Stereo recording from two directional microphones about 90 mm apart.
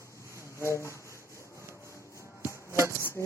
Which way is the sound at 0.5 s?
35° left (ahead or behind).